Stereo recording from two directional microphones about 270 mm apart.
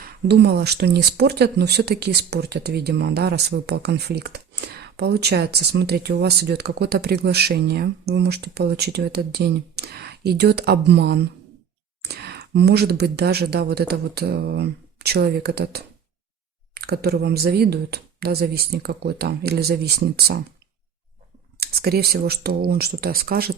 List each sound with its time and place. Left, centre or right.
0.0 s speech: right
21.6 s speech: right